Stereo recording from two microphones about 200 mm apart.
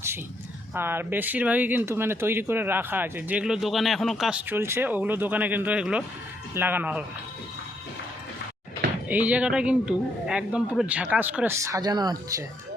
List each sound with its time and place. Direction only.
0.7 s speech: 10° right (ahead or behind)
9.0 s speech: 10° right (ahead or behind)